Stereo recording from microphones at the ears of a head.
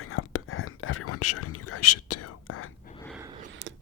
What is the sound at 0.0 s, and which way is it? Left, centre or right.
Whispering, left.